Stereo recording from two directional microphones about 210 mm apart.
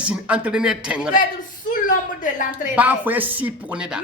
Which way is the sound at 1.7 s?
40° left (ahead or behind).